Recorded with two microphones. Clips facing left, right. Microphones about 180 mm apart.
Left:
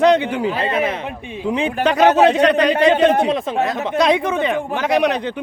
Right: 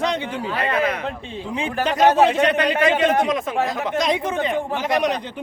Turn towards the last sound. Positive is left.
turn(degrees=70)  # may be behind; listen again after turning